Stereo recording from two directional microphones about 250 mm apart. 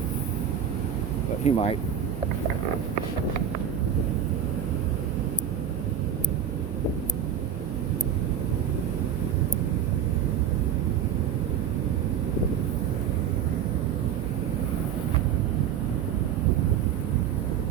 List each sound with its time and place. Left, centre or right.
1.5 s speech: left